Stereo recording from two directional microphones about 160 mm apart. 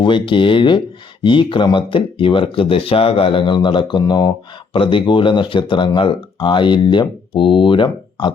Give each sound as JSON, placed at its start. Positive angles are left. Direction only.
{"t": 0.0, "sound": "speech", "side_deg": 30}